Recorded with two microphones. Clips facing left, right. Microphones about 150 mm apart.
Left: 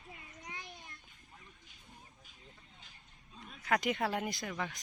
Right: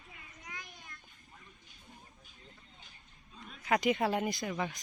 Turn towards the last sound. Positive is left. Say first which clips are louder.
# right 4 dB
turn(degrees=-5)  # may be behind; listen again after turning